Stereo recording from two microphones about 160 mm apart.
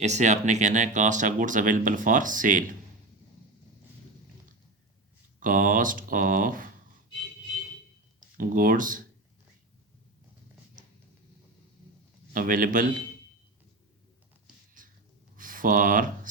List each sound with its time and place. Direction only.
0.0 s speech: 45° right (ahead or behind)
5.4 s speech: 60° right (ahead or behind)
8.4 s speech: 60° right (ahead or behind)
12.3 s speech: 60° right (ahead or behind)
14.8 s cat: 55° right (ahead or behind)
15.4 s a sound: 60° right (ahead or behind)